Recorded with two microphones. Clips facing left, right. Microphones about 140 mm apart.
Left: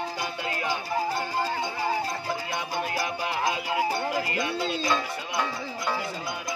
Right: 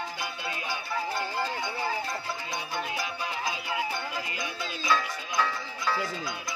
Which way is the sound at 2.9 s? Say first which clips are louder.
Left 5 dB; 70° left (ahead or behind).